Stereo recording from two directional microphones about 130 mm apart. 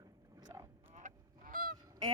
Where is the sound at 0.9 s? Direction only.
85° right.